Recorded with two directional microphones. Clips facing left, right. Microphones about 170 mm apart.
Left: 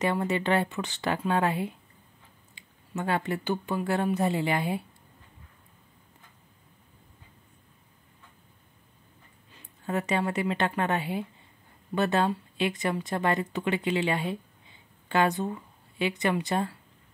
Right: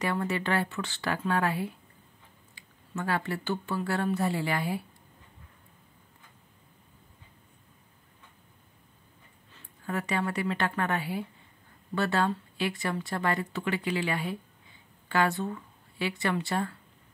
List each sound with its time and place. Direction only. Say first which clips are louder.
0.0 s speech: left 3 dB; 20° left (ahead or behind)
9.5 s a woman's voice: left 3 dB; 20° left (ahead or behind)